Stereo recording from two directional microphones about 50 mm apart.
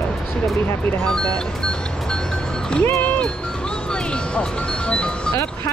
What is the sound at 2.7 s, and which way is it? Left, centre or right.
Speech, left.